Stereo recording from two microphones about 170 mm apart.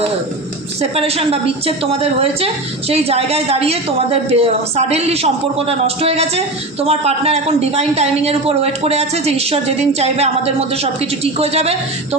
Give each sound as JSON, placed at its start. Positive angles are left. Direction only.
{"t": 0.8, "sound": "a man's voice", "side_deg": -35}